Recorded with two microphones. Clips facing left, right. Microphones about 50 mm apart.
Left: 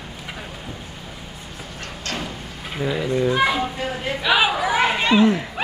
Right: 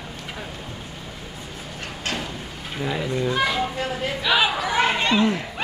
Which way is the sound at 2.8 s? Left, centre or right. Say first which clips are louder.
Left 4 dB; centre.